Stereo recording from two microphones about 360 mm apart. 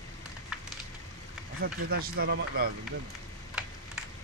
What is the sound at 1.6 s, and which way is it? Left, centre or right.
Speech, right.